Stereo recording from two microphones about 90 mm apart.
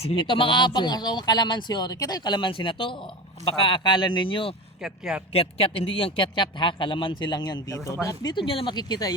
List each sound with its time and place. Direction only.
0.0 s speech: 80° left
4.8 s speech: 5° right (ahead or behind)
5.3 s speech: 90° left; by 7.9 s 40° left (ahead or behind)
8.4 s speech: 75° left (ahead or behind)
8.7 s speech: 50° left (ahead or behind)